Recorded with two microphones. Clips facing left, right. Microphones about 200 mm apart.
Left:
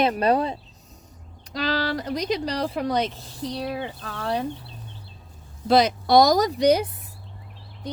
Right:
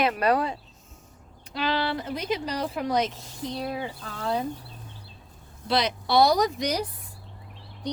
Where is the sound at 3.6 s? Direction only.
65° left (ahead or behind).